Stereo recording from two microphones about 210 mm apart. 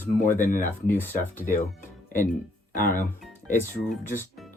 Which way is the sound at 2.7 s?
40° left (ahead or behind).